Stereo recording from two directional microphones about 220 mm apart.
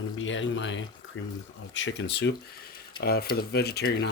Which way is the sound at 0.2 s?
60° left (ahead or behind).